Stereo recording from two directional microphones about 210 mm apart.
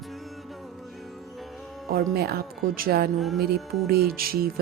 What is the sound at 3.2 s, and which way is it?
Music, centre (ahead or behind).